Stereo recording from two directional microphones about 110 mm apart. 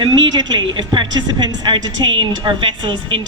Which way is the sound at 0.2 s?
40° right (ahead or behind).